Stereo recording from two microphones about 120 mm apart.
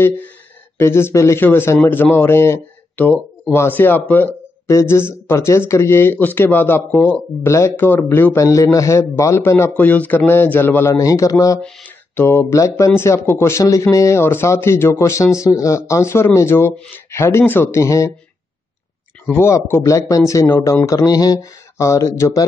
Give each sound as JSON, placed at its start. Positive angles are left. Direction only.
{"t": 0.0, "sound": "a man's voice", "side_deg": 15}
{"t": 19.3, "sound": "a man's voice", "side_deg": 20}